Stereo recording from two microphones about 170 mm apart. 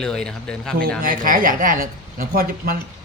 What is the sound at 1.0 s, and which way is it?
Speech, 55° right (ahead or behind).